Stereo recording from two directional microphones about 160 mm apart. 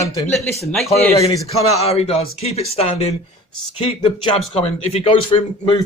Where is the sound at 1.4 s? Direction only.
40° left (ahead or behind).